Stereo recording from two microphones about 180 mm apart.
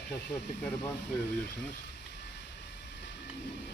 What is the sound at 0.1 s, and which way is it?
Speech, 70° left (ahead or behind).